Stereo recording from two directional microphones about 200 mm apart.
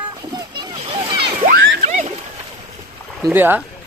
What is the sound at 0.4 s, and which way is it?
Splash, 20° right (ahead or behind).